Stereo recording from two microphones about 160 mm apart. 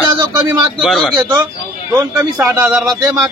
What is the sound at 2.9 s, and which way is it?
Speech, 20° right (ahead or behind).